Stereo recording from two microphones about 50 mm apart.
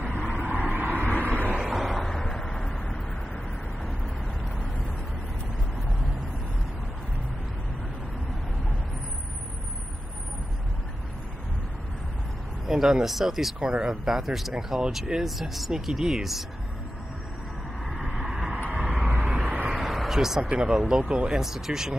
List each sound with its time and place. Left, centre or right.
0.3 s vehicle: right
1.7 s vehicle: centre
2.0 s a sound: centre
12.6 s speech: centre
17.9 s vehicle: centre
19.8 s a sound: centre
20.4 s speech: centre
20.8 s speech: centre
21.1 s speech: centre
21.4 s speech: centre